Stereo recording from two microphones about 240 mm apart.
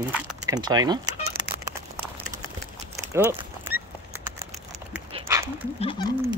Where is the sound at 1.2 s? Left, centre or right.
Right.